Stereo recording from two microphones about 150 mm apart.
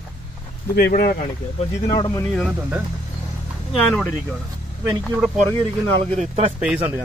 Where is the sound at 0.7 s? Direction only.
85° left.